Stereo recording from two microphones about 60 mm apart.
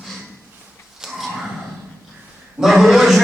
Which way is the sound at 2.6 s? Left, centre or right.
Centre.